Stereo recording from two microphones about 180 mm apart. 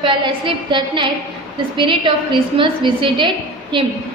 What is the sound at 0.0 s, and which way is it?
A woman's voice, 25° right (ahead or behind).